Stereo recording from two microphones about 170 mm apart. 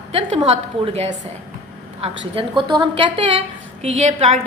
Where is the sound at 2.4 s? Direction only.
30° right (ahead or behind).